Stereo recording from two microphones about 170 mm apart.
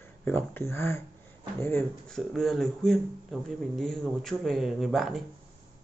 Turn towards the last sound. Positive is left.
turn(degrees=0)  # may be behind; listen again after turning